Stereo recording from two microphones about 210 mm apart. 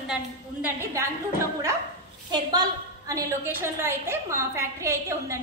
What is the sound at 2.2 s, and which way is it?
A woman's voice, 20° right (ahead or behind).